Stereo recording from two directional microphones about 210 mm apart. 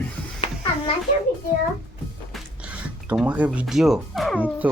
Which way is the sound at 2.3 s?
5° right (ahead or behind).